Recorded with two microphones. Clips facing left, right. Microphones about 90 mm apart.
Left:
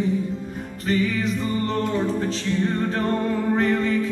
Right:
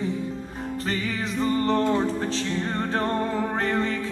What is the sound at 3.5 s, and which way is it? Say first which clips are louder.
Music: left 4 dB; 35° right (ahead or behind).